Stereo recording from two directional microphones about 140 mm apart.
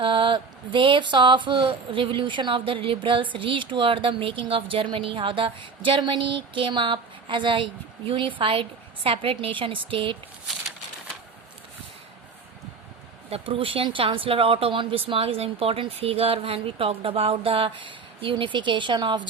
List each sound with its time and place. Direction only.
0.0 s speech: 35° right (ahead or behind)
13.3 s speech: 40° right (ahead or behind)